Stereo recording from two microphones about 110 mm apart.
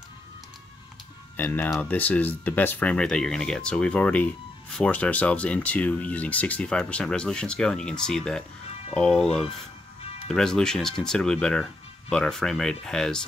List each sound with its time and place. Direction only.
1.3 s speech: 15° left (ahead or behind)
10.2 s speech: 5° left (ahead or behind)